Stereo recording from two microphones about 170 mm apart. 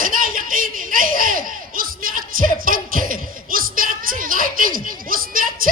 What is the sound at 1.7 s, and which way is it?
Music, 55° right (ahead or behind).